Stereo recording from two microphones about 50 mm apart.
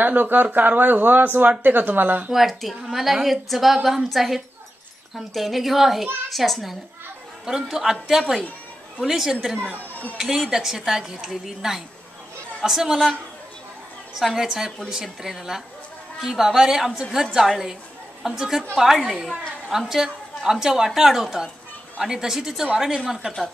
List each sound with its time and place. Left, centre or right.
0.0 s speech: right
2.3 s a woman's voice: centre
14.2 s a woman's voice: centre